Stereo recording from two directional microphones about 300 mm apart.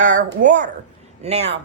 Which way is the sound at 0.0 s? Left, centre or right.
Right.